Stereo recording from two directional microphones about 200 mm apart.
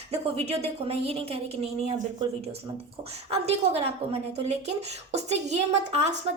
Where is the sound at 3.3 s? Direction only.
30° right (ahead or behind).